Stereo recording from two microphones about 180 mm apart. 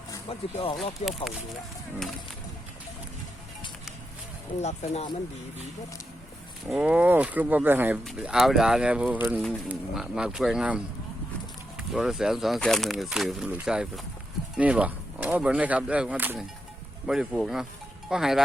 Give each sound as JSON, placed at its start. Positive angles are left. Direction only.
{"t": 0.3, "sound": "speech", "side_deg": 30}
{"t": 4.6, "sound": "speech", "side_deg": 40}
{"t": 6.7, "sound": "speech", "side_deg": -5}